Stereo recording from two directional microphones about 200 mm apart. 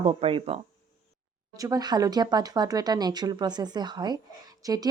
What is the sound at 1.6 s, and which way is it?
Speech, 20° right (ahead or behind).